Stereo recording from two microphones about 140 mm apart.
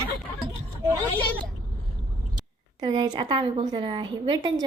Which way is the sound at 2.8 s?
30° right (ahead or behind).